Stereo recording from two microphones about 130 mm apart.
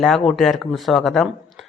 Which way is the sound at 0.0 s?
Centre (ahead or behind).